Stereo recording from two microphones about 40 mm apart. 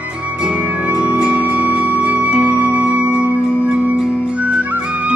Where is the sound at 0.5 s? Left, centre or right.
Right.